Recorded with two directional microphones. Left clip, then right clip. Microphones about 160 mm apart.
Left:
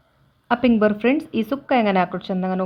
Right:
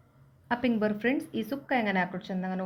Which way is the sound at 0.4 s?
45° left (ahead or behind).